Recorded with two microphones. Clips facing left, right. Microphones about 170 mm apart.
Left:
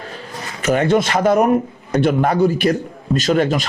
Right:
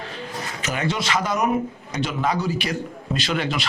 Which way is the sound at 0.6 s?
50° left (ahead or behind).